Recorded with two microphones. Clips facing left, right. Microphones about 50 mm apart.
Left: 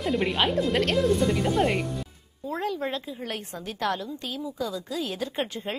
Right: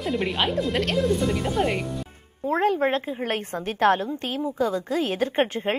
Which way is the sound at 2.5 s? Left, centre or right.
Right.